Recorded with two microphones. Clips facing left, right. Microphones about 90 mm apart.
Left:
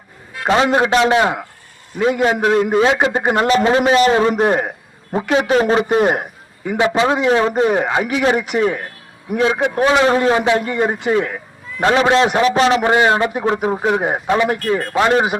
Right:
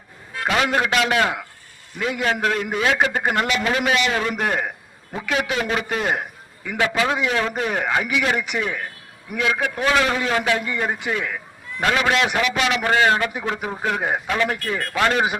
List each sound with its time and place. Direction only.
0.4 s a man's voice: 30° left (ahead or behind)
8.0 s a man's voice: 40° left (ahead or behind)
12.9 s speech: 20° left (ahead or behind)